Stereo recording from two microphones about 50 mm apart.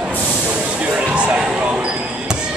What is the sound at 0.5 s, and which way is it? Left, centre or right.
Basketball bounce, right.